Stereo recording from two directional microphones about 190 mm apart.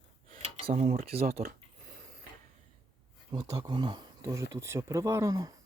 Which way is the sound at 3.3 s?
20° right (ahead or behind).